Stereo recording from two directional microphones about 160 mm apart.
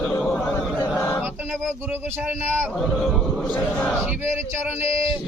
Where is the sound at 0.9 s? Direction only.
15° left (ahead or behind).